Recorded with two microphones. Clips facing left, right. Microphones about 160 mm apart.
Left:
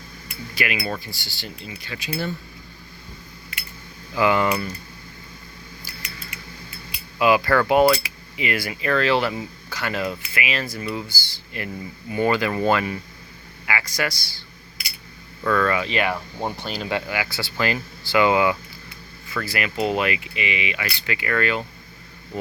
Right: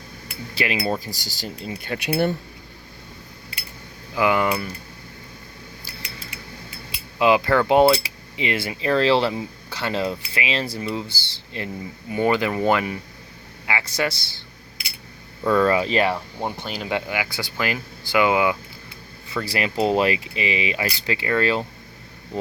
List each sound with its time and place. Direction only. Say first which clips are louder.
0.5 s speech: right 3 dB; 30° right (ahead or behind); by 2.3 s 65° right (ahead or behind)
3.5 s scissors: left 1 dB; 30° right (ahead or behind)
4.1 s speech: even; 15° right (ahead or behind)
6.9 s cutlery: right 1 dB; 20° right (ahead or behind)
12.1 s speech: right 1 dB; 20° right (ahead or behind)
13.7 s cutlery: right 1 dB; 25° right (ahead or behind)
15.4 s speech: right 3 dB; 30° right (ahead or behind)
16.1 s speech: even; centre (ahead or behind)
16.6 s speech: even; 15° right (ahead or behind)
19.3 s speech: right 2 dB; 30° right (ahead or behind)